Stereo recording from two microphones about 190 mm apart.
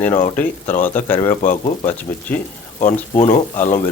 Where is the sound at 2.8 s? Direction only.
40° left (ahead or behind).